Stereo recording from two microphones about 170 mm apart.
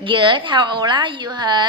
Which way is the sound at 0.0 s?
30° right (ahead or behind).